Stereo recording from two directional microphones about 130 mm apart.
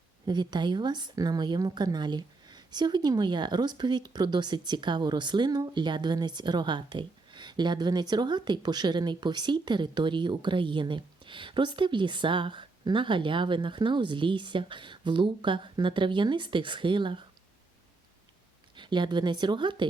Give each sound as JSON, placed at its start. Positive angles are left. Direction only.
{"t": 0.3, "sound": "speech", "side_deg": -35}
{"t": 18.8, "sound": "speech", "side_deg": -35}